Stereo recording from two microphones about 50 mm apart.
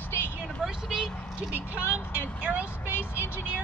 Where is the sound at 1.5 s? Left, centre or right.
Right.